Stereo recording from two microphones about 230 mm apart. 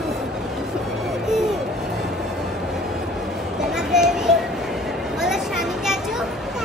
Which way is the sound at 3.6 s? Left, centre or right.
Centre.